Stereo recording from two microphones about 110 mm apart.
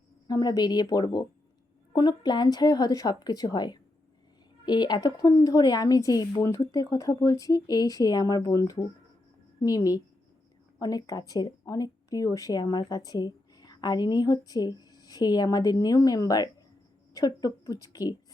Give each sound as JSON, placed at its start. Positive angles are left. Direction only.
{"t": 0.3, "sound": "speech", "side_deg": 35}